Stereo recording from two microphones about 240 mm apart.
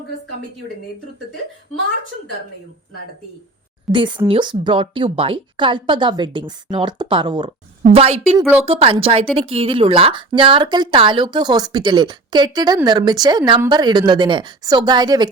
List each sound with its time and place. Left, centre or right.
3.9 s a woman's voice: centre
4.3 s a woman's voice: centre
8.4 s speech: centre
8.6 s a woman's voice: right